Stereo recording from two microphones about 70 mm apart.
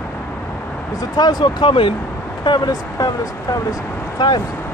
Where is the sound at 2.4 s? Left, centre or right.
Left.